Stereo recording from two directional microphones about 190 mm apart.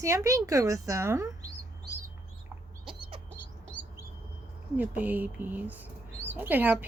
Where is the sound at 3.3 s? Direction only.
5° left (ahead or behind).